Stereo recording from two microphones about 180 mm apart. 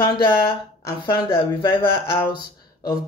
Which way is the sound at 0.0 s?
25° left (ahead or behind).